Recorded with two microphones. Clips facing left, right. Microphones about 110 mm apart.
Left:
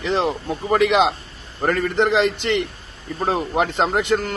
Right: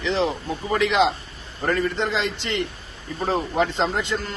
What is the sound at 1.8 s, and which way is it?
Speech, 70° left (ahead or behind).